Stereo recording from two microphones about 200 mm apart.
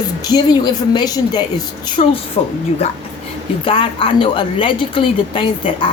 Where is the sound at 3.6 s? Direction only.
25° left (ahead or behind).